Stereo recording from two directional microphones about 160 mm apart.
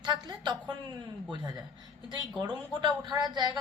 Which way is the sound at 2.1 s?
25° right (ahead or behind).